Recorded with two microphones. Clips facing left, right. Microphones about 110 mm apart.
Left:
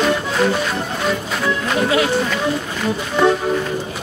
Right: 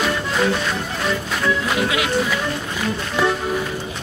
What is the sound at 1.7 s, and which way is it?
Music, 35° left (ahead or behind).